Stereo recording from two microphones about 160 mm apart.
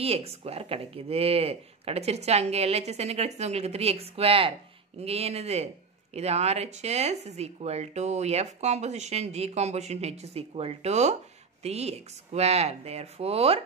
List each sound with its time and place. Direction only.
0.0 s speech: 40° right (ahead or behind)